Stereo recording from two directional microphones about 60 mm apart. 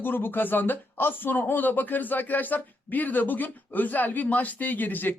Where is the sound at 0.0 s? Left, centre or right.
Left.